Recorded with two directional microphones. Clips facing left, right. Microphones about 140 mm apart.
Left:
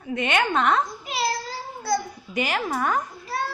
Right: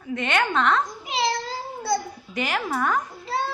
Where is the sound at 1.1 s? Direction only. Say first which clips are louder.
Right 2 dB; 20° right (ahead or behind).